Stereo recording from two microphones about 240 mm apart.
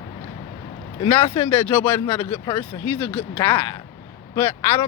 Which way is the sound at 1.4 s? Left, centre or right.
Centre.